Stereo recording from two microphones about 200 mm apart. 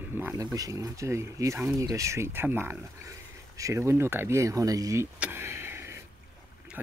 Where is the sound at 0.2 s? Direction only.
10° right (ahead or behind).